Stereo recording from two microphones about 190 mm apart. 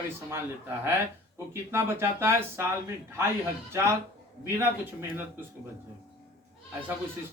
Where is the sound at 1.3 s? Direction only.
15° right (ahead or behind).